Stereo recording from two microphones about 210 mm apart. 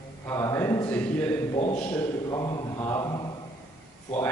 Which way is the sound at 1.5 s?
30° left (ahead or behind).